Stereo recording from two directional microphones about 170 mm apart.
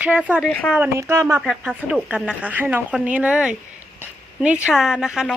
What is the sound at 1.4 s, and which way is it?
Speech, 5° right (ahead or behind).